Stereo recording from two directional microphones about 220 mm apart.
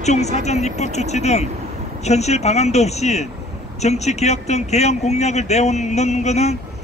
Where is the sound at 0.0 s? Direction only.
30° left (ahead or behind).